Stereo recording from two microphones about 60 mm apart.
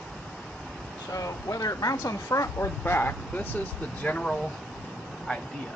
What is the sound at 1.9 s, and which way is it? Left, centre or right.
Speech, left.